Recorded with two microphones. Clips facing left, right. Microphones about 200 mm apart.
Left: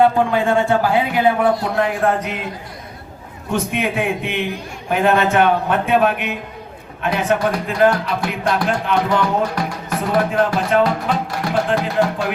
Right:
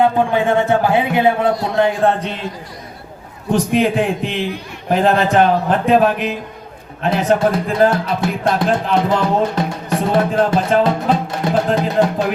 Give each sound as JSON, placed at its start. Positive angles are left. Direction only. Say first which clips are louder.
{"t": 0.4, "sound": "music", "louder": "right 1 dB", "side_deg": -20}
{"t": 3.5, "sound": "a man's voice", "louder": "right 5 dB", "side_deg": -35}
{"t": 7.3, "sound": "music", "louder": "right 3 dB", "side_deg": -25}